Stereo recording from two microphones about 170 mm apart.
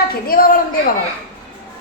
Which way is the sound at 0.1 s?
60° left (ahead or behind).